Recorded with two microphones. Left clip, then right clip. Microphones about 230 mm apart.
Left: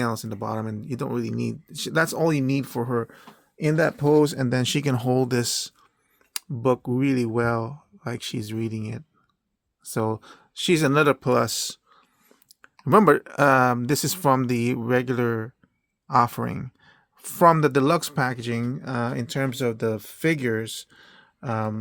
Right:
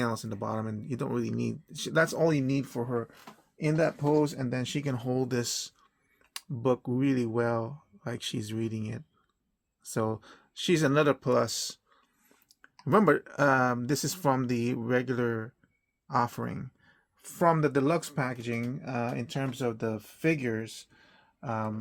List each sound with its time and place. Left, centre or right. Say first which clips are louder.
0.0 s speech: left 5 dB; left